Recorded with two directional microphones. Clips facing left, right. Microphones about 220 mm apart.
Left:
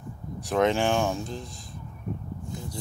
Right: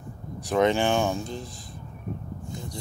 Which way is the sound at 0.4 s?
Centre (ahead or behind).